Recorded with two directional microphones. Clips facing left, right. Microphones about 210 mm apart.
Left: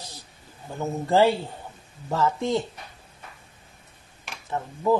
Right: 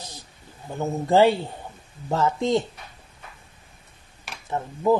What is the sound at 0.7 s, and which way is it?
Speech, 20° right (ahead or behind).